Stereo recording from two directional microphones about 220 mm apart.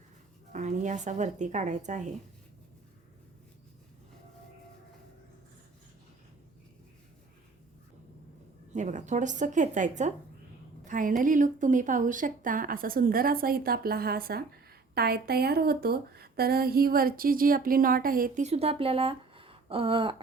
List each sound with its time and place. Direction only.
0.5 s a woman's voice: 35° right (ahead or behind)
8.7 s a woman's voice: 35° right (ahead or behind)